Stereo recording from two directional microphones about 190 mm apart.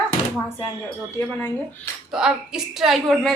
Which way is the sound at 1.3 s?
10° left (ahead or behind).